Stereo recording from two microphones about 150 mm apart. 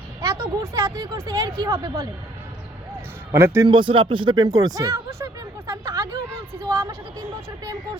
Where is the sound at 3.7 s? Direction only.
35° right (ahead or behind).